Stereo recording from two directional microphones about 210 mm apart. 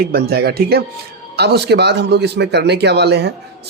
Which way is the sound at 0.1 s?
50° right (ahead or behind).